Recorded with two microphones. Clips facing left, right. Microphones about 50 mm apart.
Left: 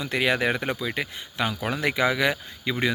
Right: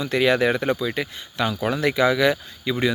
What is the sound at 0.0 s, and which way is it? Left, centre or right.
Speech, centre.